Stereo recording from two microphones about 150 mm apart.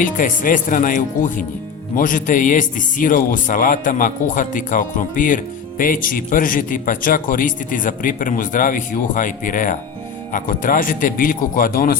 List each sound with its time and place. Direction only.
0.0 s speech: 65° left (ahead or behind)